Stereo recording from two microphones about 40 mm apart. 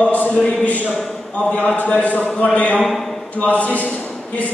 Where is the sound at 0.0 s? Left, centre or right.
Left.